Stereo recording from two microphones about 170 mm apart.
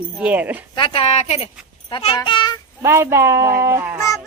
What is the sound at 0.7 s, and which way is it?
Speech, 30° left (ahead or behind).